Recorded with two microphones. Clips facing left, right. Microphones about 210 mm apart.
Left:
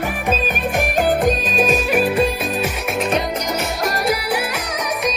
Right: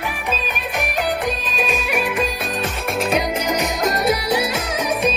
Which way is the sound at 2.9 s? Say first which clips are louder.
Right 1 dB; 5° right (ahead or behind).